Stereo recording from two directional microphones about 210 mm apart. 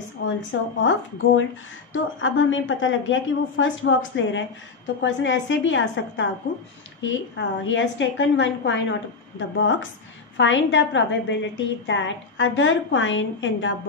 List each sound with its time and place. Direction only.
0.2 s a woman's voice: 60° left (ahead or behind)